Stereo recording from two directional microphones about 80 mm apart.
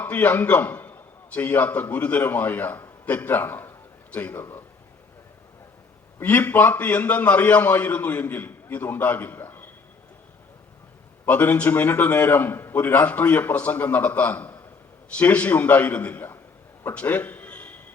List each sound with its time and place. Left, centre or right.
0.0 s a man's voice: left
6.2 s a man's voice: left
11.3 s a man's voice: centre
16.8 s a sound: centre